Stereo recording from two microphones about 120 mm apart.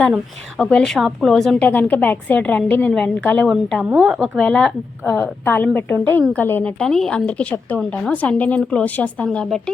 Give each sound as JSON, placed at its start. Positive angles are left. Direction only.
{"t": 0.5, "sound": "a woman's voice", "side_deg": 10}
{"t": 4.4, "sound": "a woman's voice", "side_deg": 5}